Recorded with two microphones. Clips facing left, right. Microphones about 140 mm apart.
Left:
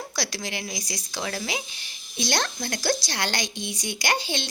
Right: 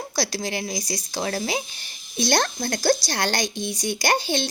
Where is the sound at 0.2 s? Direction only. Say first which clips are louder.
Right 6 dB; 35° right (ahead or behind).